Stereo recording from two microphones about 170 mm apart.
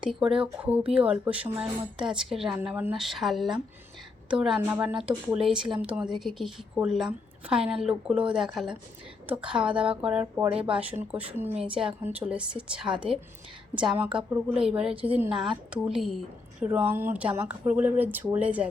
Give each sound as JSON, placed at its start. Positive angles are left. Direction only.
{"t": 0.0, "sound": "a woman's voice", "side_deg": -5}